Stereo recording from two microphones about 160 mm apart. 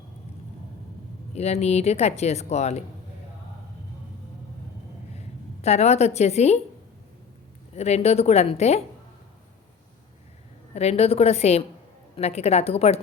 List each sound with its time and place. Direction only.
1.3 s speech: 40° left (ahead or behind)
5.6 s speech: 45° left (ahead or behind)
7.8 s a woman's voice: 40° left (ahead or behind)
10.8 s a woman's voice: 40° left (ahead or behind)